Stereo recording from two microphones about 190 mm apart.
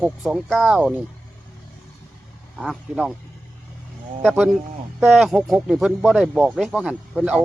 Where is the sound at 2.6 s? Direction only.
Centre (ahead or behind).